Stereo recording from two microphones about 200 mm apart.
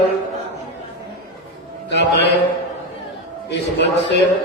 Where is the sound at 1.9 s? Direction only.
60° left (ahead or behind).